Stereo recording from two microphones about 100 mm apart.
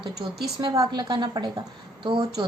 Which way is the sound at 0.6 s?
40° right (ahead or behind).